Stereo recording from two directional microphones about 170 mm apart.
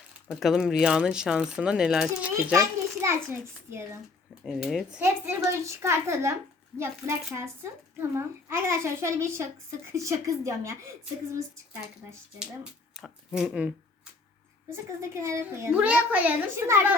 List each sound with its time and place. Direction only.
0.3 s speech: centre (ahead or behind)
2.6 s children playing: 15° right (ahead or behind)
4.4 s speech: centre (ahead or behind)
4.9 s speech: 15° right (ahead or behind)
13.0 s speech: 5° right (ahead or behind)
15.1 s speech: 15° right (ahead or behind)